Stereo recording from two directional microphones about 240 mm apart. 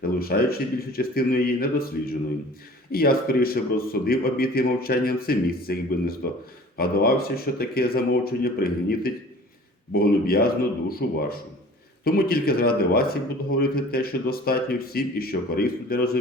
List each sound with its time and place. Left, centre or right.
0.2 s speech: left